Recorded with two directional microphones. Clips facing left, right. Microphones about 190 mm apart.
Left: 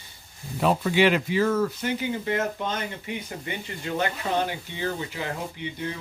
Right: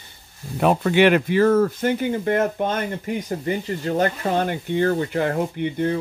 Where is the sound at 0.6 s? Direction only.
60° right (ahead or behind).